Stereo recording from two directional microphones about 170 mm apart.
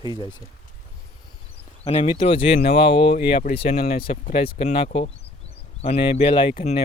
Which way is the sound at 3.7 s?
70° left (ahead or behind).